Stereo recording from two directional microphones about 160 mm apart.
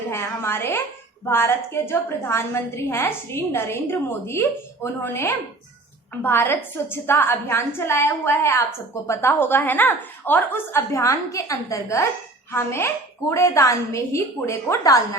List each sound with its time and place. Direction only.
0.1 s a woman's voice: 15° left (ahead or behind)